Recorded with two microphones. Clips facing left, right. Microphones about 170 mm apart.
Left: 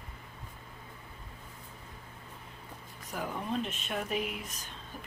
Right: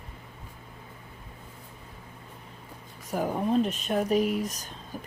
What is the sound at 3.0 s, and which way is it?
Speech, 45° right (ahead or behind).